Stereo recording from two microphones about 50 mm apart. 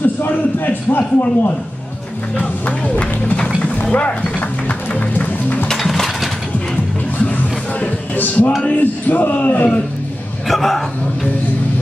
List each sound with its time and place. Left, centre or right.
0.2 s a sound: left
2.3 s a man's voice: left
5.7 s ratchet: centre
7.8 s music: left
8.6 s a man's voice: left
10.5 s a man's voice: centre